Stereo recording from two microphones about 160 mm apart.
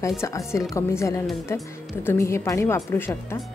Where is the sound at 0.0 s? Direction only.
20° left (ahead or behind).